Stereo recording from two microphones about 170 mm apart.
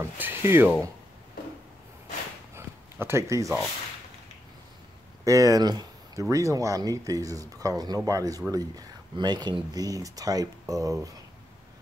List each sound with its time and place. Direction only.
0.0 s speech: 10° right (ahead or behind)
2.5 s a sound: 15° right (ahead or behind)
5.2 s speech: 20° right (ahead or behind)